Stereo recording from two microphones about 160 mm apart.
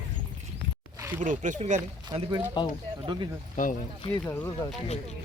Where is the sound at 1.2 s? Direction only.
55° right (ahead or behind).